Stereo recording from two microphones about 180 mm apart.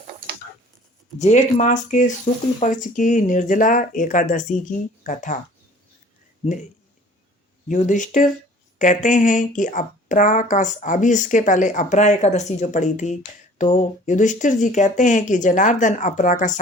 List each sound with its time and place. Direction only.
1.2 s speech: 40° left (ahead or behind)
7.7 s speech: 45° left (ahead or behind)